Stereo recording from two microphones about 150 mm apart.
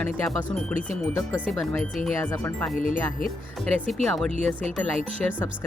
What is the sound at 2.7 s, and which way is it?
Speech, 65° left (ahead or behind).